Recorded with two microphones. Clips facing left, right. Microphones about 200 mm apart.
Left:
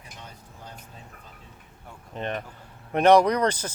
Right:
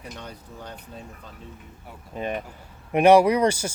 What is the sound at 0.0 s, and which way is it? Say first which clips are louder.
Speech: right 7 dB; 70° right (ahead or behind).